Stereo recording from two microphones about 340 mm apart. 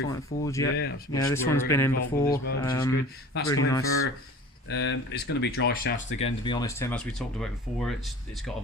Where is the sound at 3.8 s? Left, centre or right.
Left.